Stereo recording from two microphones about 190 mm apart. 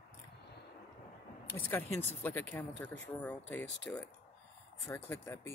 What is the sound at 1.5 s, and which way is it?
Speech, 10° left (ahead or behind).